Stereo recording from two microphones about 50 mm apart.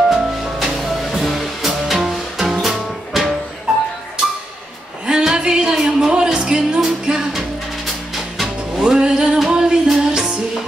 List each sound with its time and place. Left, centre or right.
0.1 s music: centre
5.0 s a sound: centre
5.9 s music: centre
7.3 s music: centre
8.7 s music: centre